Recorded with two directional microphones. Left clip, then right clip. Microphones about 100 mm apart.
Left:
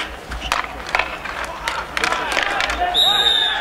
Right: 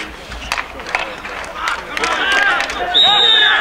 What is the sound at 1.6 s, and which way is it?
Run, centre (ahead or behind).